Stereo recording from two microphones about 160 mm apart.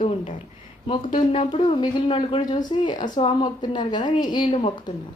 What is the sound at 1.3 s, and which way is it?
Speech, 35° left (ahead or behind).